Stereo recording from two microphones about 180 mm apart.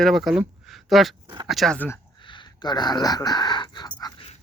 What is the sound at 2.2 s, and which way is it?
Speech, 25° left (ahead or behind).